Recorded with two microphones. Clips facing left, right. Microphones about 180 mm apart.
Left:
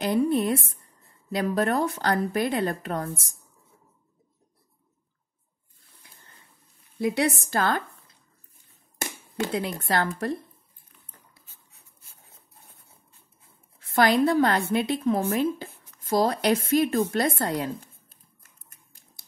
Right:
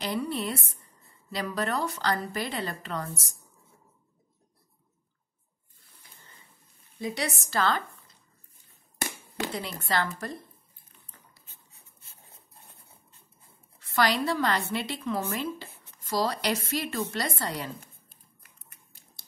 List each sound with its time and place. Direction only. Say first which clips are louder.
0.0 s a woman's voice: left 8 dB; 50° left (ahead or behind)
7.0 s a woman's voice: left 8 dB; 60° left (ahead or behind)
9.5 s a woman's voice: left 4 dB; 55° left (ahead or behind)
13.7 s a woman's voice: left 6 dB; 55° left (ahead or behind)